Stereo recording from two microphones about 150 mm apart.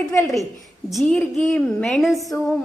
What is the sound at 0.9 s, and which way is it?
A woman's voice, centre (ahead or behind).